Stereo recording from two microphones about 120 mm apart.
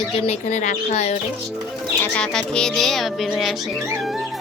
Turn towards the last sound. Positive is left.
turn(degrees=0)  # may be behind; listen again after turning